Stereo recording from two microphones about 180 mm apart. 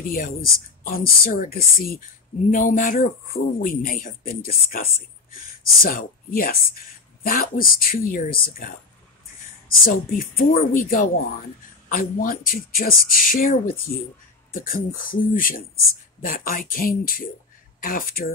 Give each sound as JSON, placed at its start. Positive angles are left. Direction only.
{"t": 0.0, "sound": "a man's voice", "side_deg": 50}
{"t": 9.8, "sound": "a man's voice", "side_deg": 55}